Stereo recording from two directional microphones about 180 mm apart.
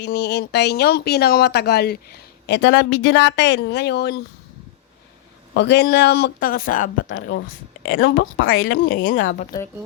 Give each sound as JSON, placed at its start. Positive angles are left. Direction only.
{"t": 0.0, "sound": "speech", "side_deg": 65}
{"t": 5.5, "sound": "speech", "side_deg": 70}
{"t": 7.1, "sound": "speech", "side_deg": 80}